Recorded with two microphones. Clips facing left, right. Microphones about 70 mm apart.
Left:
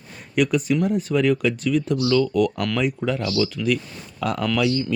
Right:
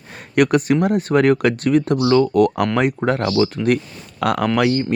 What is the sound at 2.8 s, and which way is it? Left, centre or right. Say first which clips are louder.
Speech: right 4 dB; right.